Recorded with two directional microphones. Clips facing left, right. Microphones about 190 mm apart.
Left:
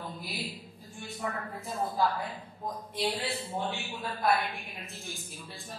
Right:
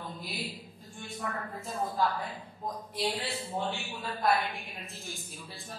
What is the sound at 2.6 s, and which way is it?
A man's voice, centre (ahead or behind).